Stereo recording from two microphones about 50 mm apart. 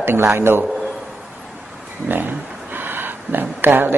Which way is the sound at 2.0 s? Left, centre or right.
Right.